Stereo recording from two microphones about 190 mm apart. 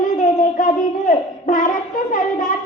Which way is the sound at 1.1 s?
40° left (ahead or behind).